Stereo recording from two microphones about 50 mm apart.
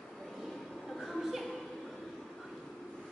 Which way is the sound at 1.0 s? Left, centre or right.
Centre.